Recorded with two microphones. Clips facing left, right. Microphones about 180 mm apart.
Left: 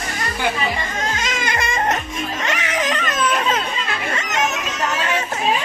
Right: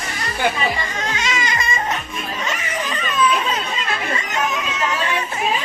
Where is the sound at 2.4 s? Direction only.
80° left.